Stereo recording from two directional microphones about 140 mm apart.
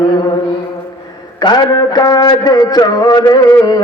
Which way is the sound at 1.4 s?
30° left (ahead or behind).